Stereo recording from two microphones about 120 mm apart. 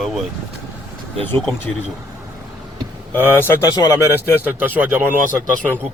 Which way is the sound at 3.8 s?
30° left (ahead or behind).